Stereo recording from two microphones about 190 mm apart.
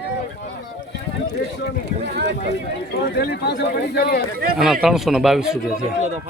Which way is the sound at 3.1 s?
55° left (ahead or behind).